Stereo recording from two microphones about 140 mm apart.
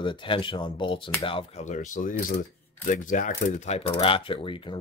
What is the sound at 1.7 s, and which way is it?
Speech, 65° left (ahead or behind).